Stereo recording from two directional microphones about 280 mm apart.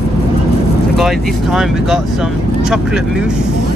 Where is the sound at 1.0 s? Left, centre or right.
Centre.